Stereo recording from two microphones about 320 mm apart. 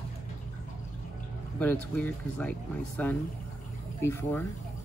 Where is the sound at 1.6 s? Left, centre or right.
Centre.